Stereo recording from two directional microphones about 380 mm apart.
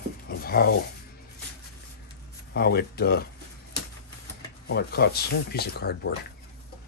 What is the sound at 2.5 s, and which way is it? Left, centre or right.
Speech, left.